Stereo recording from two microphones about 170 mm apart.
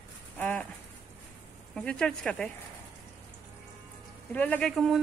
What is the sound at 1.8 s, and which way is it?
Speech, 5° left (ahead or behind).